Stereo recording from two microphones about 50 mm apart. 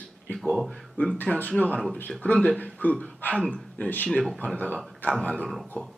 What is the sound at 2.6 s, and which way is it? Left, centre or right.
A man's voice, left.